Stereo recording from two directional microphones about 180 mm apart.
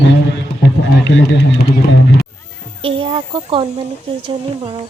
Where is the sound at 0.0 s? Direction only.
80° left.